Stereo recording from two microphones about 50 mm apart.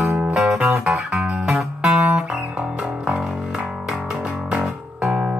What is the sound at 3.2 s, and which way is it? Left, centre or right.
Music, centre.